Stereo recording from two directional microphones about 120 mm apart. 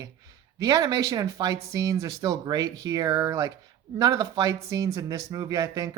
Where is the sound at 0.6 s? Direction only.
30° right (ahead or behind).